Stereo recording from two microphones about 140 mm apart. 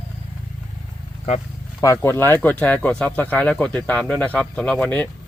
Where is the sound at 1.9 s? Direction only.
15° left (ahead or behind).